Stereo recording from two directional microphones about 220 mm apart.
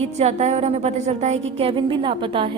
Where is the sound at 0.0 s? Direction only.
30° right (ahead or behind).